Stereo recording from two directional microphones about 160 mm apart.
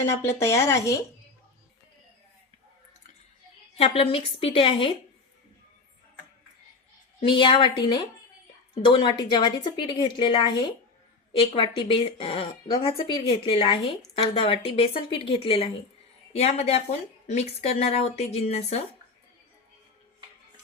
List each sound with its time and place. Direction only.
0.3 s speech: 15° left (ahead or behind)
3.8 s speech: 35° left (ahead or behind)
7.3 s a woman's voice: 35° left (ahead or behind)